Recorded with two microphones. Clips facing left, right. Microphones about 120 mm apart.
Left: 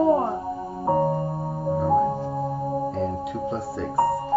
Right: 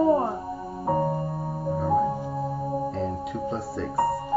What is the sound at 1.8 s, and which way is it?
Music, 15° left (ahead or behind).